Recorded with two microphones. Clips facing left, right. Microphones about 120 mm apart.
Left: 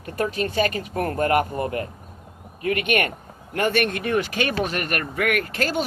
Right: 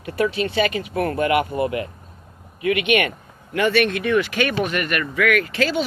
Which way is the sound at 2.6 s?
45° left (ahead or behind).